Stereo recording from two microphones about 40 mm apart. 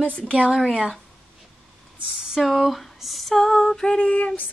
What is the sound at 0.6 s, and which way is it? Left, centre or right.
Speech, centre.